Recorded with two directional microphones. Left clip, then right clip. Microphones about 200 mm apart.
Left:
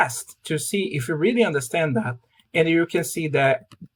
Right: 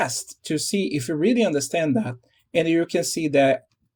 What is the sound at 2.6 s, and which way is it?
Speech, 30° right (ahead or behind).